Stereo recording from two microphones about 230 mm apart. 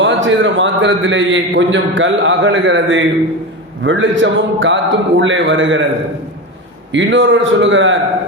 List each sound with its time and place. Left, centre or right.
0.0 s a man's voice: right
6.9 s a man's voice: right